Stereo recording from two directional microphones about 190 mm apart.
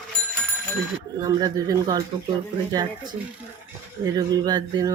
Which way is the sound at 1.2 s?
20° right (ahead or behind).